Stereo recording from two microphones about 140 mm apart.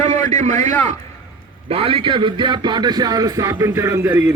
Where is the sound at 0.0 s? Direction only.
55° right (ahead or behind).